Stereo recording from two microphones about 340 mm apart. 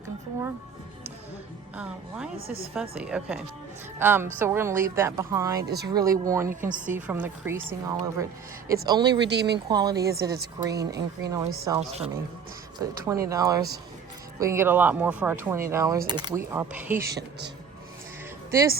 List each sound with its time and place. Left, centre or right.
1.7 s a woman's voice: centre
5.6 s speech: right
5.9 s a woman's voice: centre
6.7 s speech: right
6.9 s a woman's voice: centre
9.2 s speech: right
9.6 s a woman's voice: centre